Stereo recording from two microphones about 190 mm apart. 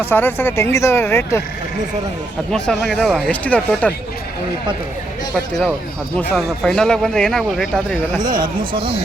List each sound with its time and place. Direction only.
0.0 s speech: 10° left (ahead or behind)
2.5 s a man's voice: 5° left (ahead or behind)
6.1 s a man's voice: 5° left (ahead or behind)
8.4 s speech: 25° right (ahead or behind)